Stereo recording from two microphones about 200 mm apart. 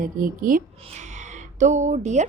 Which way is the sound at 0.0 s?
45° right (ahead or behind).